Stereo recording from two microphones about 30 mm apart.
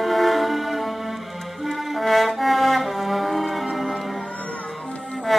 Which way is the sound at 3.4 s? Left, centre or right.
Centre.